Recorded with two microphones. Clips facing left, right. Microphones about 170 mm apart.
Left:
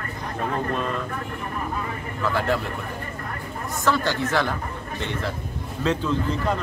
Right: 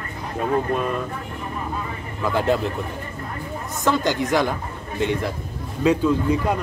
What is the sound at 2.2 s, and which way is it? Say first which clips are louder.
Speech: right 3 dB; 20° right (ahead or behind).